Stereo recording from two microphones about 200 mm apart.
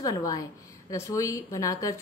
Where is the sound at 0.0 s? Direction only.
20° left (ahead or behind).